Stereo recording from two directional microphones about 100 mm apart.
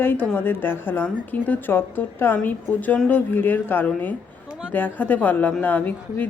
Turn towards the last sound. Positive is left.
turn(degrees=15)  # may be behind; listen again after turning